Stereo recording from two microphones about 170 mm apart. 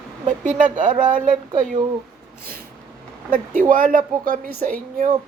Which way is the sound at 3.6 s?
50° right (ahead or behind).